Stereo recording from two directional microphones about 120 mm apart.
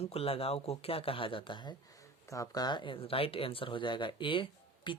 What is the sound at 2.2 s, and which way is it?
Speech, 25° left (ahead or behind).